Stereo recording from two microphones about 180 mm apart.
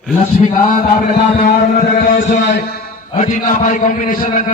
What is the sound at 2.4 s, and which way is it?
Speech, 65° left (ahead or behind).